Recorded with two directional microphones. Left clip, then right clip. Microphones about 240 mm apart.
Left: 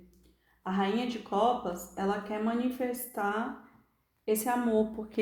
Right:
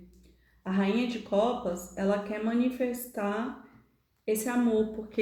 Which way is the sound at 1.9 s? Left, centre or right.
Left.